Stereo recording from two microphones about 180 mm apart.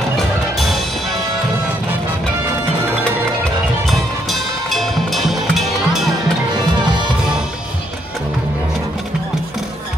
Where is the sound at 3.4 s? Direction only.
Centre (ahead or behind).